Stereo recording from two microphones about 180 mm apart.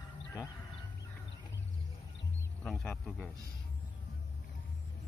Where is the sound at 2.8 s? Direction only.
5° left (ahead or behind).